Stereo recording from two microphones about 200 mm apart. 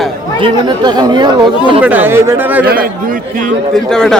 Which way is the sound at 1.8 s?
10° right (ahead or behind).